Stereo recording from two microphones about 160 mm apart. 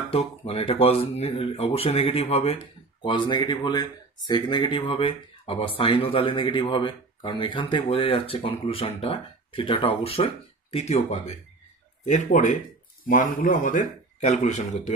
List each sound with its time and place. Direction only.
0.1 s a man's voice: 35° left (ahead or behind)